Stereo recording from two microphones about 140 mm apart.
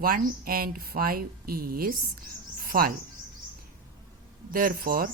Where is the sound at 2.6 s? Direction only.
90° right.